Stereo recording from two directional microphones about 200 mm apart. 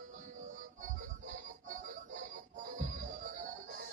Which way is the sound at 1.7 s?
40° right (ahead or behind).